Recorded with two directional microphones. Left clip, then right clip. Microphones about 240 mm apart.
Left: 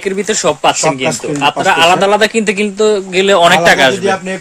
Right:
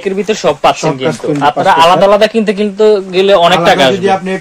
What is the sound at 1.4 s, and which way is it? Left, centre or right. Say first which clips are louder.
A man's voice: right 3 dB; left.